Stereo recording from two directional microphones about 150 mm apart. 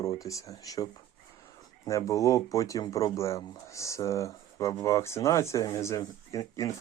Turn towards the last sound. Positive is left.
turn(degrees=20)  # may be behind; listen again after turning